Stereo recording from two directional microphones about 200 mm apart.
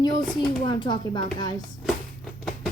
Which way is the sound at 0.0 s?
20° left (ahead or behind).